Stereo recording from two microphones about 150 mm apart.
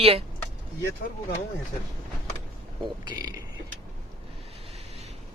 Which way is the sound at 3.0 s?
25° right (ahead or behind).